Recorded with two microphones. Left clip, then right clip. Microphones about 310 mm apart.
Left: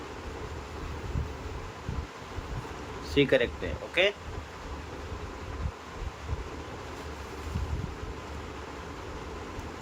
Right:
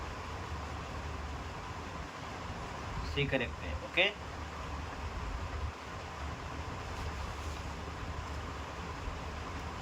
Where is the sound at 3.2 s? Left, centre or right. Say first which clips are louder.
Left 9 dB; centre.